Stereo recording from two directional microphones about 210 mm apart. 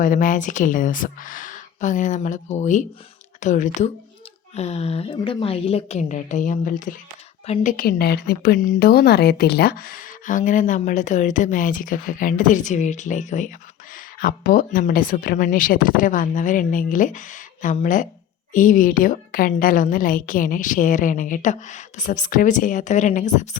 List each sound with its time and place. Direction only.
0.0 s a woman's voice: 40° left (ahead or behind)